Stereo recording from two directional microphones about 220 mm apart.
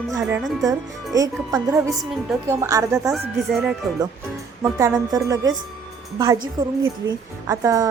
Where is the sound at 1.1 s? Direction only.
15° right (ahead or behind).